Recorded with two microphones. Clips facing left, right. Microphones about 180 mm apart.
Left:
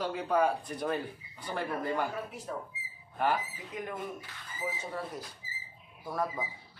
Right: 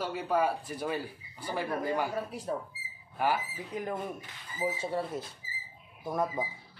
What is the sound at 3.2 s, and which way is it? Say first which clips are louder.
Speech: even; 10° right (ahead or behind).